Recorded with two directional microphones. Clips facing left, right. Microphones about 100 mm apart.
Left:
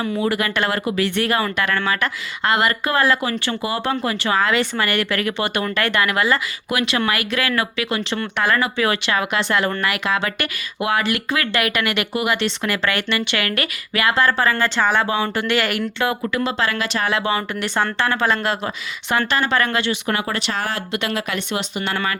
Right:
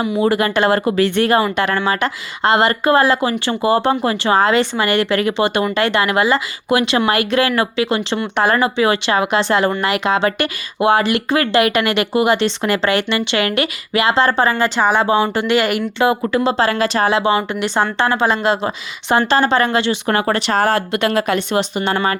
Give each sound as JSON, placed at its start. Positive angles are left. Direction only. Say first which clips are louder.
{"t": 0.2, "sound": "speech", "louder": "right 7 dB", "side_deg": -30}
{"t": 16.0, "sound": "speech", "louder": "right 7 dB", "side_deg": -30}